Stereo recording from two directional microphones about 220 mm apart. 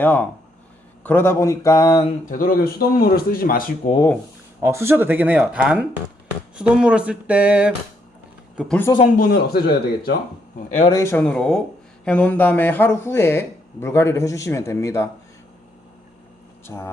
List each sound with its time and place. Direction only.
0.0 s speech: 10° left (ahead or behind)
2.3 s a man's voice: 40° left (ahead or behind)
4.6 s speech: 10° right (ahead or behind); by 8.9 s 5° left (ahead or behind)
9.1 s speech: 45° left (ahead or behind)
10.8 s speech: 20° left (ahead or behind)
16.6 s speech: 10° left (ahead or behind)